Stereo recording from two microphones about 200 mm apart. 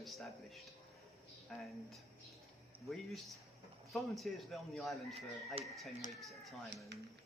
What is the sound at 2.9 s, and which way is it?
Speech, centre (ahead or behind).